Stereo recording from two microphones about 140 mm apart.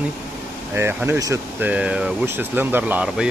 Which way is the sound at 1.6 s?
10° right (ahead or behind).